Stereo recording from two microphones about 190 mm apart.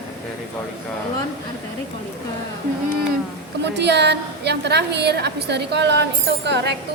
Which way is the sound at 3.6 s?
65° right (ahead or behind).